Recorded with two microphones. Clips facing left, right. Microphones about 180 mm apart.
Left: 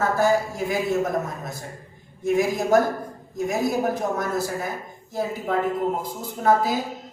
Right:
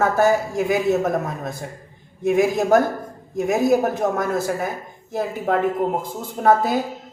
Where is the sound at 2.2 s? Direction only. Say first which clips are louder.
Right 4 dB; 55° right (ahead or behind).